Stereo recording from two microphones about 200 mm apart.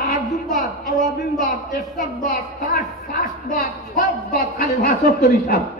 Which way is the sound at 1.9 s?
45° left (ahead or behind).